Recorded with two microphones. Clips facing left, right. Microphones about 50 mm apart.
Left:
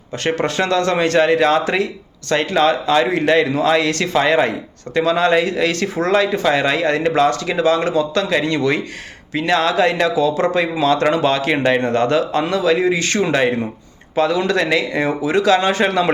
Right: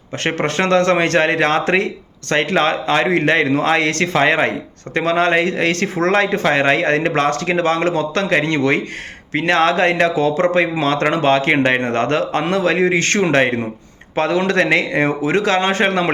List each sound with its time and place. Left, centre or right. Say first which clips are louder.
0.2 s speech: even; right